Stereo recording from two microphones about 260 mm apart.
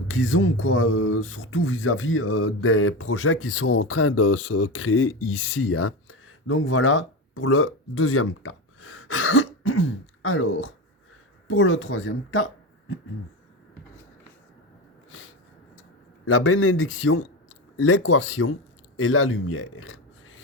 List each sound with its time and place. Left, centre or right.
0.1 s speech: left
16.2 s speech: left